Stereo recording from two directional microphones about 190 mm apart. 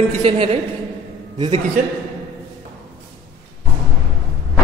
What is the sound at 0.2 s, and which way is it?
Speech, 30° right (ahead or behind).